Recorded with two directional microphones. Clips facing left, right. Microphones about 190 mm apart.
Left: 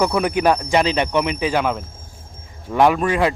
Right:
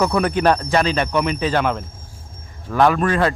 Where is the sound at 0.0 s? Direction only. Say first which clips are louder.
Even; 10° left (ahead or behind).